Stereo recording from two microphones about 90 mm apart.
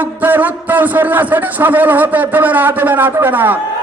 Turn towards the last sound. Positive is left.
turn(degrees=-20)  # may be behind; listen again after turning